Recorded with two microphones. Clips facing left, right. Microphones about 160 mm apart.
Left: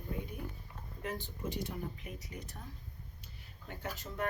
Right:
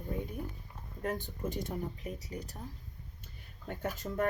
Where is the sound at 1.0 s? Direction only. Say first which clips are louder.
Right 4 dB; 50° right (ahead or behind).